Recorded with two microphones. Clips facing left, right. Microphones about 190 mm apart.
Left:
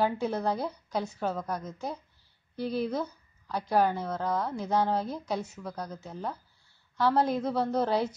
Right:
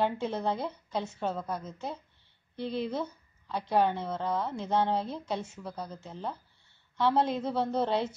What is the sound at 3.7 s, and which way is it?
A woman's voice, 5° left (ahead or behind).